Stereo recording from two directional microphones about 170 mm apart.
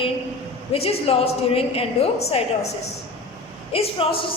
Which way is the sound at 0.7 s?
35° left (ahead or behind).